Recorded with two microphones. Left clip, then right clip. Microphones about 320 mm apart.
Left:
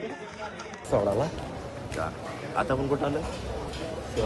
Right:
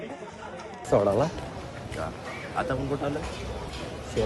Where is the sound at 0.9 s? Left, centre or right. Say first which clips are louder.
Right 3 dB; right.